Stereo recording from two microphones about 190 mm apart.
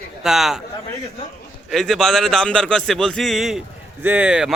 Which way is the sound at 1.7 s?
Centre (ahead or behind).